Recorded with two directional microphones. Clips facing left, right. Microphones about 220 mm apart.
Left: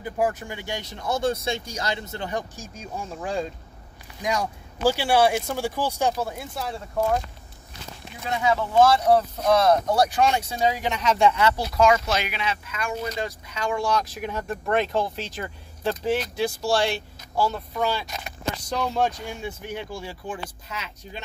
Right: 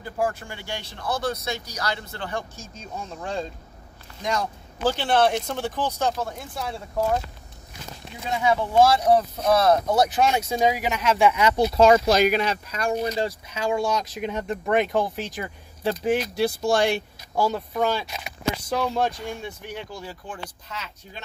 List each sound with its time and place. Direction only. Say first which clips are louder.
0.0 s speech: left 1 dB; 20° left (ahead or behind); by 7.2 s centre (ahead or behind)
8.5 s speech: even; 10° right (ahead or behind)
11.3 s speech: right 3 dB; 15° right (ahead or behind)
17.4 s speech: right 2 dB; 15° right (ahead or behind)
19.9 s speech: left 3 dB; 10° left (ahead or behind)